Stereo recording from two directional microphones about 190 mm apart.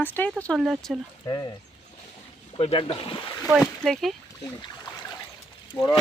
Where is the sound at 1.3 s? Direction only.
20° left (ahead or behind).